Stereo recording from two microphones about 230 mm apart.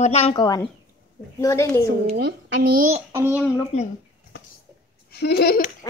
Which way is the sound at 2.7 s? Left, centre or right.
Right.